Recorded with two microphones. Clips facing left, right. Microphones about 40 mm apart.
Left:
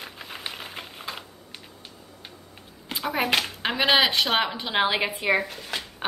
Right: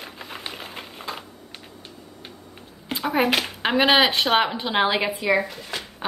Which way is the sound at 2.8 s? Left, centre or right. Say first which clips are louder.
Right 4 dB; centre.